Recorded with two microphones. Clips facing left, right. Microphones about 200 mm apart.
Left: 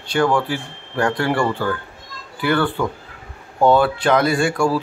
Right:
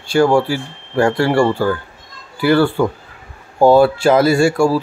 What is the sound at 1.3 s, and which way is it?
Speech, 30° right (ahead or behind).